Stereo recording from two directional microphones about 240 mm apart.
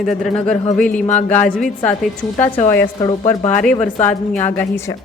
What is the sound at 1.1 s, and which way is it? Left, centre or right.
A woman's voice, centre.